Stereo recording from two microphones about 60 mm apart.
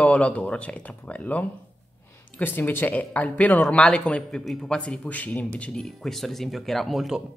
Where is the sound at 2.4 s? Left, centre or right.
Left.